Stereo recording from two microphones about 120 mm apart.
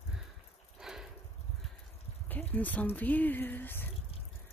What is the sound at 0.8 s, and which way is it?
Sniff, 5° right (ahead or behind).